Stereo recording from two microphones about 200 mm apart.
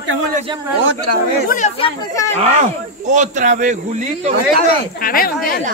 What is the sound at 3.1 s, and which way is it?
Speech, 40° right (ahead or behind).